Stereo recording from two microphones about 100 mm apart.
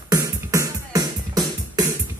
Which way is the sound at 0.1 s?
30° right (ahead or behind).